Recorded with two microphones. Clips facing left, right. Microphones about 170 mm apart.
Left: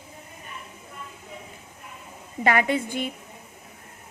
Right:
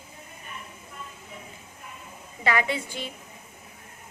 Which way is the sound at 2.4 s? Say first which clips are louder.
Left 4 dB; 50° left (ahead or behind).